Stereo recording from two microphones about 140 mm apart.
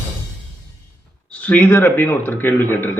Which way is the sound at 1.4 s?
10° left (ahead or behind).